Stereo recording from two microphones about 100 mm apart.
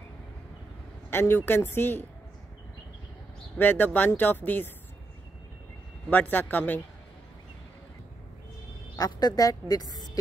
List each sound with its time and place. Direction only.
1.1 s speech: 20° left (ahead or behind)
3.5 s speech: 20° left (ahead or behind)
6.0 s speech: 15° left (ahead or behind)
8.9 s a woman's voice: 40° left (ahead or behind)